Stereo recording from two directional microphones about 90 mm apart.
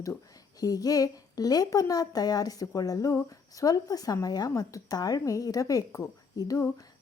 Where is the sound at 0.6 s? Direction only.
45° left (ahead or behind).